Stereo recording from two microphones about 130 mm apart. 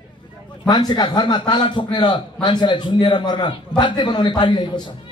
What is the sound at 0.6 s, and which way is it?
A man's voice, 35° left (ahead or behind).